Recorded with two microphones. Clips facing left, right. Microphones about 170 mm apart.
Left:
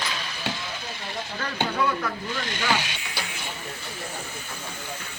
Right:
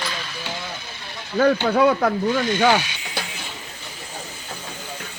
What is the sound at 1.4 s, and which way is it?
Speech, 75° right (ahead or behind).